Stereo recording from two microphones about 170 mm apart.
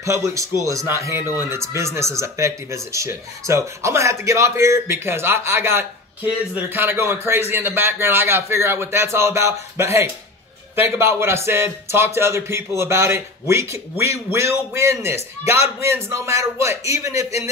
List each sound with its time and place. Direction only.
0.0 s speech: 15° right (ahead or behind)